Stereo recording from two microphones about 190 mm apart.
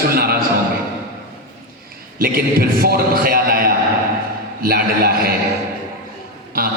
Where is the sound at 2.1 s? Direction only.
50° right (ahead or behind).